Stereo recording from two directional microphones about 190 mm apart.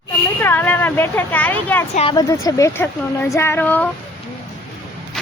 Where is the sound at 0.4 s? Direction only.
10° left (ahead or behind).